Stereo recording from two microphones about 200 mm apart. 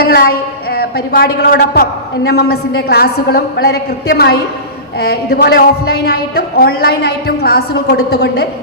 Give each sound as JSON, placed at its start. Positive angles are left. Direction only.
{"t": 0.0, "sound": "a woman's voice", "side_deg": 50}